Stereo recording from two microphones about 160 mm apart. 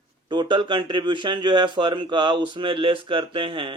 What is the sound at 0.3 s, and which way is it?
Speech, 30° right (ahead or behind).